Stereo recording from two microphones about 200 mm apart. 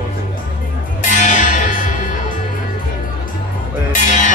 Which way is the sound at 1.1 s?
35° left (ahead or behind).